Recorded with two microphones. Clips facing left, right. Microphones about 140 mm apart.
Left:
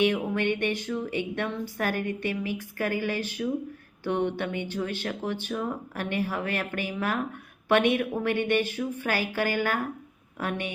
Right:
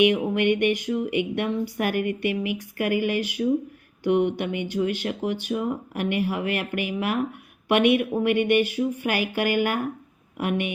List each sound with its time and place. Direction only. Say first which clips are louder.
0.0 s speech: right 5 dB; 15° right (ahead or behind)